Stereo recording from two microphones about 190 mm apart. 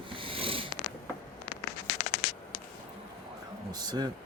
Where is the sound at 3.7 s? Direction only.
20° right (ahead or behind).